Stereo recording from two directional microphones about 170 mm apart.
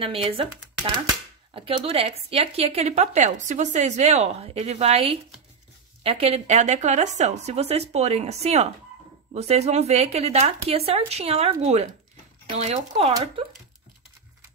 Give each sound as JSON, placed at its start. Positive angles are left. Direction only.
{"t": 0.0, "sound": "a woman's voice", "side_deg": -35}
{"t": 1.5, "sound": "a woman's voice", "side_deg": -35}